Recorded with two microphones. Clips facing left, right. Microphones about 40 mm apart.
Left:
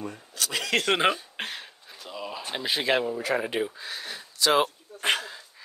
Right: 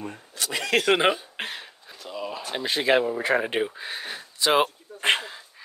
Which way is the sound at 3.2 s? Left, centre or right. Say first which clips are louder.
Right 3 dB; right.